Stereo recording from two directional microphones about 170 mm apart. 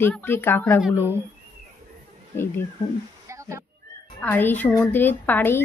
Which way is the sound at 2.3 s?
15° left (ahead or behind).